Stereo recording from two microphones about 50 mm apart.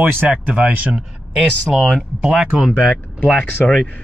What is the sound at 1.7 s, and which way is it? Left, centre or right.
Speech, centre.